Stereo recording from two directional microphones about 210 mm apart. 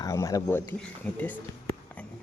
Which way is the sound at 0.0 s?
15° left (ahead or behind).